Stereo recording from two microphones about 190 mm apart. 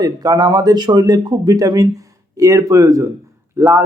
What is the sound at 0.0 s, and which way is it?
Speech, 20° right (ahead or behind).